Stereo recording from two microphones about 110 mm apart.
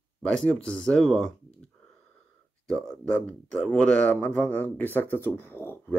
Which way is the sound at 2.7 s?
10° left (ahead or behind).